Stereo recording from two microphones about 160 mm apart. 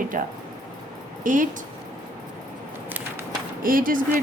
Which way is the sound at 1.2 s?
55° right (ahead or behind).